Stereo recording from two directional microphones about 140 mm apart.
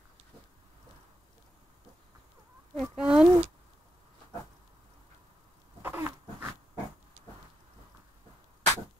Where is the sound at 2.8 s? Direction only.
5° right (ahead or behind).